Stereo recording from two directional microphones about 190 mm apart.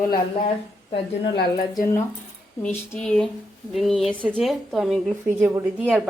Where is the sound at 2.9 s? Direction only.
5° left (ahead or behind).